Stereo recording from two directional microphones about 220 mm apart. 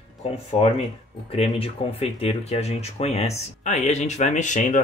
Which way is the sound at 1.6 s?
25° left (ahead or behind).